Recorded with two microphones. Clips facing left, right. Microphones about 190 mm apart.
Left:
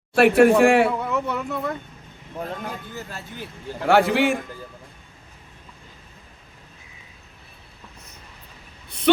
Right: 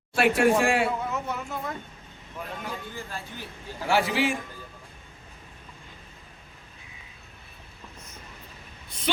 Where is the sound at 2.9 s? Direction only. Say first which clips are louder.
Left 2 dB; 45° left (ahead or behind).